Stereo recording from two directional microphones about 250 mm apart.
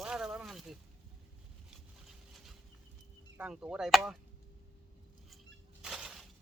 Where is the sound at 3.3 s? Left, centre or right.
Centre.